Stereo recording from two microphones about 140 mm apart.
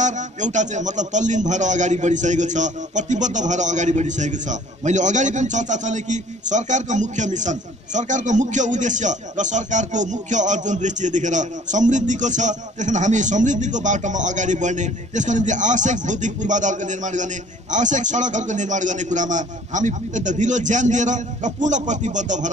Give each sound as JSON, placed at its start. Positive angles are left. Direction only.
{"t": 0.0, "sound": "a man's voice", "side_deg": -60}